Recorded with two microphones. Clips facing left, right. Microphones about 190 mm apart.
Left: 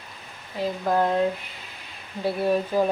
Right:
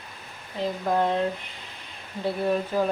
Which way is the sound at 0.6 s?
5° left (ahead or behind).